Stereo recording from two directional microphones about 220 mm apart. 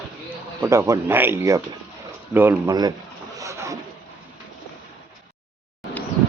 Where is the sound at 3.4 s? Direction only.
15° right (ahead or behind).